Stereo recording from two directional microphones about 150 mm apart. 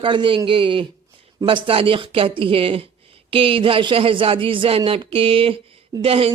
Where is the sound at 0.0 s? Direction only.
35° right (ahead or behind).